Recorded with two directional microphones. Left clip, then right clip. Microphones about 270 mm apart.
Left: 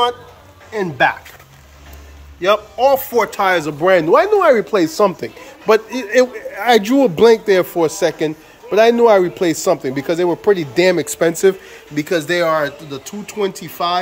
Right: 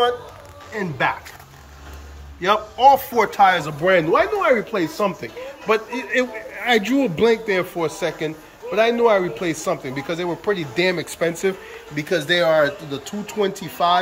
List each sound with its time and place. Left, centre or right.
0.7 s speech: left
2.4 s speech: centre